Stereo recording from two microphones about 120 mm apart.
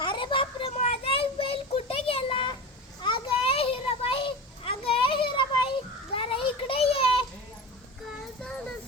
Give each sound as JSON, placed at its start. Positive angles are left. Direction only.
{"t": 0.0, "sound": "children playing", "side_deg": 40}
{"t": 0.8, "sound": "child singing", "side_deg": 55}
{"t": 3.0, "sound": "a sound", "side_deg": 45}
{"t": 6.1, "sound": "children playing", "side_deg": 50}